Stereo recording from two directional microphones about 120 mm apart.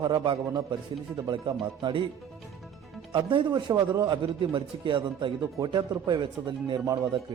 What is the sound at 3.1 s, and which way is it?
Speech, 45° right (ahead or behind).